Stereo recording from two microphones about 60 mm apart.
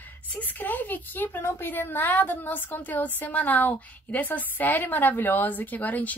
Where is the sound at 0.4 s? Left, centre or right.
Left.